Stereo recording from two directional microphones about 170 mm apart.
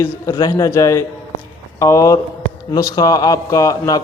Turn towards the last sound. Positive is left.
turn(degrees=20)  # may be behind; listen again after turning